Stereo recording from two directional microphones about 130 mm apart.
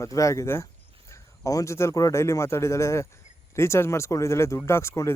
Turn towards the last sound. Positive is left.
turn(degrees=20)  # may be behind; listen again after turning